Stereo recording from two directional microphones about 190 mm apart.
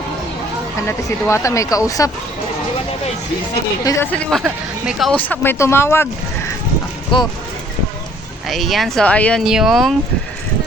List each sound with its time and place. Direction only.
0.9 s speech: 15° left (ahead or behind)
3.8 s speech: 10° left (ahead or behind)
7.1 s speech: 25° left (ahead or behind)
8.4 s speech: centre (ahead or behind)